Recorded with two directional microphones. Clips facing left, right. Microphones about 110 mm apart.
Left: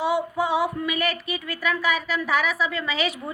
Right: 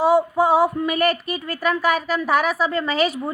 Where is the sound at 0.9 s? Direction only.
45° right (ahead or behind).